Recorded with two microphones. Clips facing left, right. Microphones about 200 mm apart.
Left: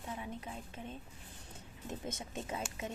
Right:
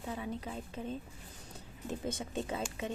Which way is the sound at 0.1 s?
35° right (ahead or behind).